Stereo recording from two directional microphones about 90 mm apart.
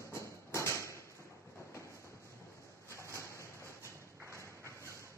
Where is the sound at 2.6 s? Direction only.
30° left (ahead or behind).